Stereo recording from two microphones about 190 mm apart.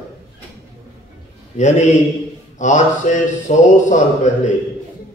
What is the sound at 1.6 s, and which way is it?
A man's voice, 35° left (ahead or behind).